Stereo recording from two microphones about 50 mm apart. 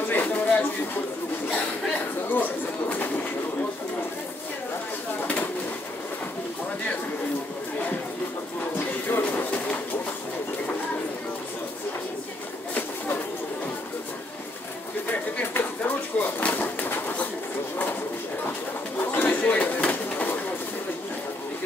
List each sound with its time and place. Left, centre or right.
0.0 s a sound: left
1.5 s speech: left
2.0 s speech: left
5.2 s bird: left
8.7 s music: left
9.2 s a sound: left
15.8 s bird: left
18.9 s bird: left
19.5 s a sound: left